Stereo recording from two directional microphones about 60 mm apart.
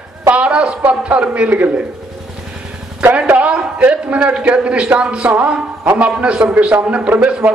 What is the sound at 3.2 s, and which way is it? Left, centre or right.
A man's voice, right.